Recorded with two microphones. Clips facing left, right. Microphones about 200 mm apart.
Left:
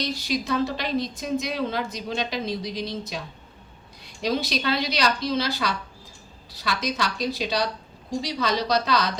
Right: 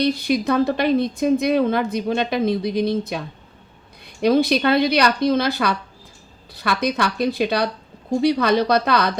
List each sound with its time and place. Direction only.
0.0 s a woman's voice: 55° right (ahead or behind)